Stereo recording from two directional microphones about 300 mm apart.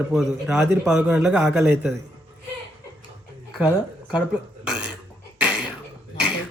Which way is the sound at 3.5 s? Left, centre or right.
Centre.